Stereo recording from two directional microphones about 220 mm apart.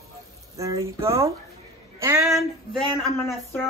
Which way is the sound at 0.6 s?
15° right (ahead or behind).